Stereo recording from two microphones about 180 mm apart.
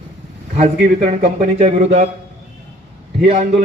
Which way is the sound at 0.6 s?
35° right (ahead or behind).